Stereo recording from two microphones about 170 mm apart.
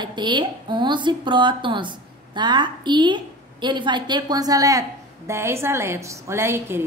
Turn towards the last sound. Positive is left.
turn(degrees=-15)  # may be behind; listen again after turning